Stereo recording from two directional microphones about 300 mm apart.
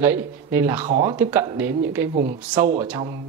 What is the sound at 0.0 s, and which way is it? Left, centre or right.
Speech, centre.